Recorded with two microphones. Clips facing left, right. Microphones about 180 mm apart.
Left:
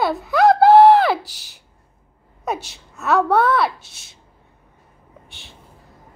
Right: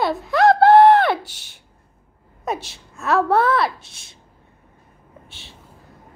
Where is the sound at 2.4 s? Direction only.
Centre (ahead or behind).